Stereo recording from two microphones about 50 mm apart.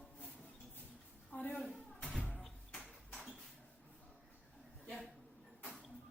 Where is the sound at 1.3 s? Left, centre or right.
Left.